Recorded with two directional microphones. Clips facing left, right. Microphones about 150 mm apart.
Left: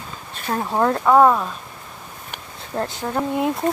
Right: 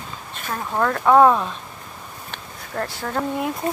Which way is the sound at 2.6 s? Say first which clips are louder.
Left 2 dB; 20° left (ahead or behind).